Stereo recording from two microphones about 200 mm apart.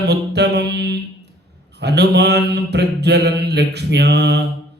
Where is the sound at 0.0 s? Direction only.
55° right (ahead or behind).